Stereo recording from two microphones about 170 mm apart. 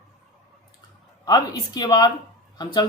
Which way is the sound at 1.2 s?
25° left (ahead or behind).